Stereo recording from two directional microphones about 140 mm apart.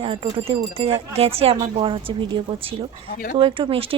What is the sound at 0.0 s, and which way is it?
A woman's voice, 40° right (ahead or behind).